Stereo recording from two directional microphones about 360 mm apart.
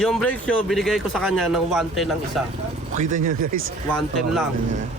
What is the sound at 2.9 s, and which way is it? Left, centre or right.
Speech, right.